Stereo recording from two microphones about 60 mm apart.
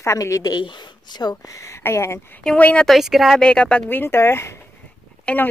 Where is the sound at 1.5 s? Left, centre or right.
Left.